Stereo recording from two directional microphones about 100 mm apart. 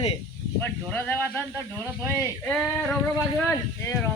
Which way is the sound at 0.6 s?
20° left (ahead or behind).